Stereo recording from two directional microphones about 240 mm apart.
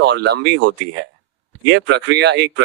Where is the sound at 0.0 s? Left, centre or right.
Right.